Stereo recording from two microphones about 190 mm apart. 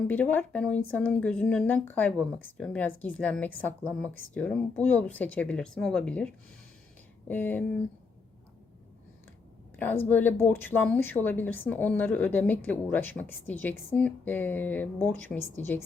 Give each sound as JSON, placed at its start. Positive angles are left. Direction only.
{"t": 0.1, "sound": "a woman's voice", "side_deg": 10}
{"t": 9.7, "sound": "a woman's voice", "side_deg": 10}